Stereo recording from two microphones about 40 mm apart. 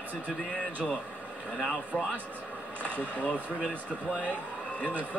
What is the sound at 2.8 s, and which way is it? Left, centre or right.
Speech, left.